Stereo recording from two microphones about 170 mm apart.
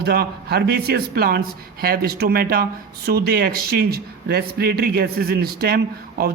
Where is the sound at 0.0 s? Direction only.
70° right (ahead or behind).